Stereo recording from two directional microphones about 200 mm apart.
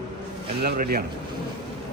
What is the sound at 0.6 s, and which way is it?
Speech, 50° right (ahead or behind).